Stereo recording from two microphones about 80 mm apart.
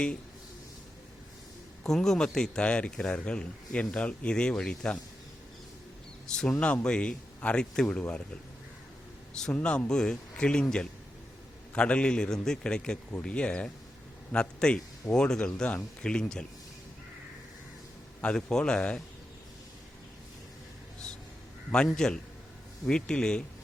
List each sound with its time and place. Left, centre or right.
1.8 s a man's voice: centre
6.3 s a man's voice: centre
9.6 s a man's voice: centre
18.2 s a man's voice: centre
21.7 s a man's voice: centre